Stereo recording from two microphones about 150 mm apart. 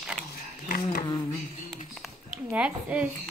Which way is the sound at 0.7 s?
70° left (ahead or behind).